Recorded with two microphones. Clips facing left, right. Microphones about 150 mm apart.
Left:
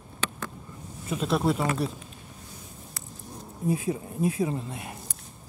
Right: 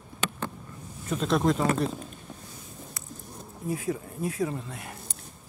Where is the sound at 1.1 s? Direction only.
5° left (ahead or behind).